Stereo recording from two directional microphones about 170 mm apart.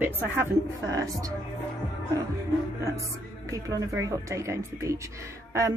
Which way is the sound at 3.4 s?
20° right (ahead or behind).